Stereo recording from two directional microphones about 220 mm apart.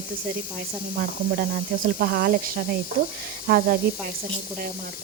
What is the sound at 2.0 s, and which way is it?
Speech, 45° right (ahead or behind).